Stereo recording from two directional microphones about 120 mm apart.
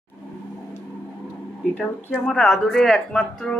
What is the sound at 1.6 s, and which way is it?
Speech, 15° left (ahead or behind).